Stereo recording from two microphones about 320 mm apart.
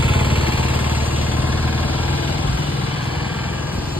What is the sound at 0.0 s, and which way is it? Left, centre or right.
Lawn mower, centre.